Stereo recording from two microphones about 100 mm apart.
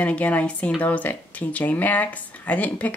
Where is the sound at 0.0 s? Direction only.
15° left (ahead or behind).